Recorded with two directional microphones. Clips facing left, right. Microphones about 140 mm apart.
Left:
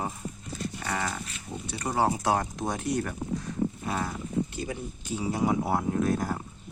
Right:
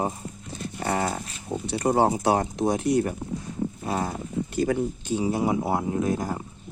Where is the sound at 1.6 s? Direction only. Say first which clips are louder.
Right 5 dB; 25° right (ahead or behind).